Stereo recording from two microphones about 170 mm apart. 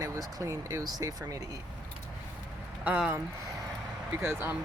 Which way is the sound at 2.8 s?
10° right (ahead or behind).